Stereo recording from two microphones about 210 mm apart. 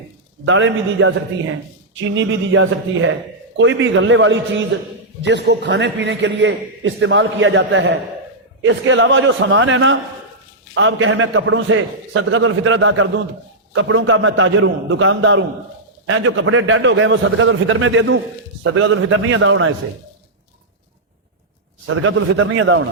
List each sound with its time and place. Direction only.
0.4 s a man's voice: 65° right (ahead or behind)
21.8 s a man's voice: 75° right (ahead or behind)